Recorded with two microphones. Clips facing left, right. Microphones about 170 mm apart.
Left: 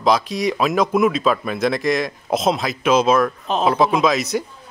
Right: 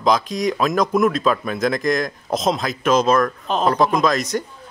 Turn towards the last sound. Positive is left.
turn(degrees=5)  # may be behind; listen again after turning